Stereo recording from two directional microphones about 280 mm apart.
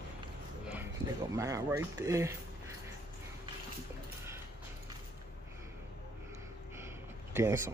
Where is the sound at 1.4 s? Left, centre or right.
Centre.